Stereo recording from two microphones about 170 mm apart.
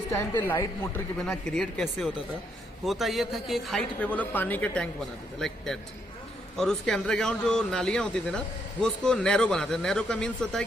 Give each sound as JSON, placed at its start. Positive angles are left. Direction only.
{"t": 0.1, "sound": "speech", "side_deg": 15}
{"t": 1.2, "sound": "a man's voice", "side_deg": 5}